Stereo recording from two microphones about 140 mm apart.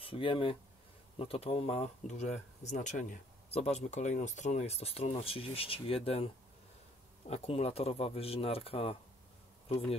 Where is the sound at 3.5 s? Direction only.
50° left (ahead or behind).